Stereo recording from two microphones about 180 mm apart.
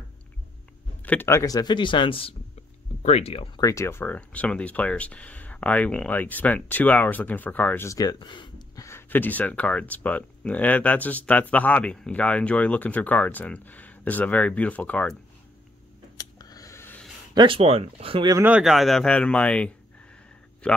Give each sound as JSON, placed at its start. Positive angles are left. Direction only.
{"t": 1.0, "sound": "speech", "side_deg": 10}
{"t": 3.6, "sound": "speech", "side_deg": 15}
{"t": 16.2, "sound": "a sound", "side_deg": 20}
{"t": 17.3, "sound": "speech", "side_deg": -25}
{"t": 18.3, "sound": "speech", "side_deg": -10}